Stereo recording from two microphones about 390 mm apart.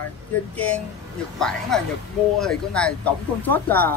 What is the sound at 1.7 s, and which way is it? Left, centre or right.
Speech, centre.